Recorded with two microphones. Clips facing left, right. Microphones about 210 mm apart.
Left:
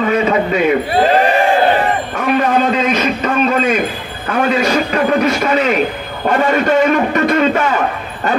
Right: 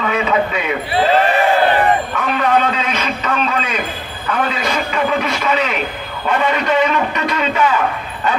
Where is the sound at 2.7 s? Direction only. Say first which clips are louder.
Left 6 dB; 45° left (ahead or behind).